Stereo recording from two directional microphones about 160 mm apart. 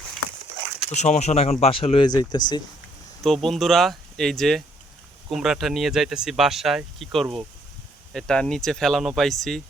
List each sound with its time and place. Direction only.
0.9 s speech: 45° left (ahead or behind); by 2.6 s 25° left (ahead or behind)
3.2 s speech: centre (ahead or behind)